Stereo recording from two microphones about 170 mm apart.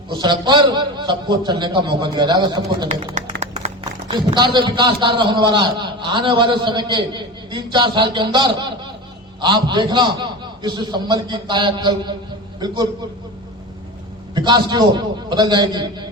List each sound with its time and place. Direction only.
0.1 s a man's voice: 25° right (ahead or behind)
3.6 s a sound: 45° right (ahead or behind)
4.1 s a man's voice: 25° right (ahead or behind)
14.3 s a man's voice: 25° right (ahead or behind)